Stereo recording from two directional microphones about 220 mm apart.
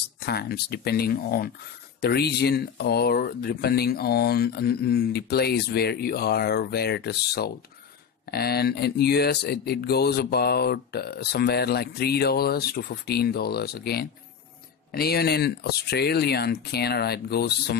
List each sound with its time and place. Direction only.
0.2 s speech: 45° left (ahead or behind)